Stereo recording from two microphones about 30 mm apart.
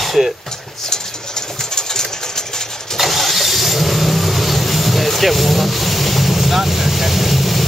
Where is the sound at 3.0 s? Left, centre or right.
Centre.